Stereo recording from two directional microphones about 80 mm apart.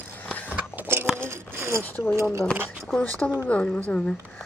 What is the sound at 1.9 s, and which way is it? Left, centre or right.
Speech, left.